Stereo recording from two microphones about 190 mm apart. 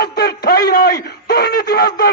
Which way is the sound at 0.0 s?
55° left (ahead or behind).